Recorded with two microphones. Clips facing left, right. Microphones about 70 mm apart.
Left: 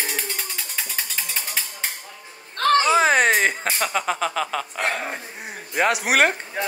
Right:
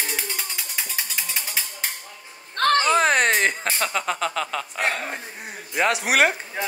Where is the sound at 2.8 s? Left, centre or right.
Centre.